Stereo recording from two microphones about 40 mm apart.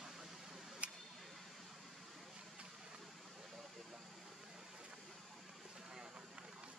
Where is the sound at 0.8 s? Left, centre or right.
Right.